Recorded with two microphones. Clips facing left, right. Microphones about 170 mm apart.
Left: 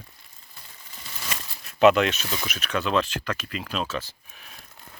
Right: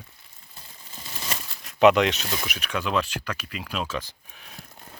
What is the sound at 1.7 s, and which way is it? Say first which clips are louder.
Speech: even; 15° right (ahead or behind).